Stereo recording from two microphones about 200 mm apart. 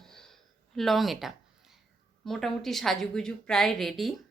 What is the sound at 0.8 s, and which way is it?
Speech, centre (ahead or behind).